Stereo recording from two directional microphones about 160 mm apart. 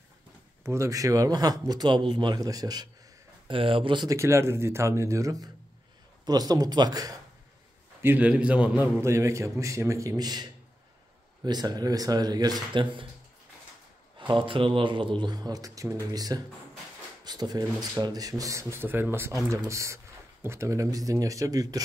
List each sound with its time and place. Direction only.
0.7 s speech: 20° right (ahead or behind)
8.0 s a man's voice: 10° right (ahead or behind); by 13.0 s 30° right (ahead or behind)
14.1 s speech: 30° right (ahead or behind)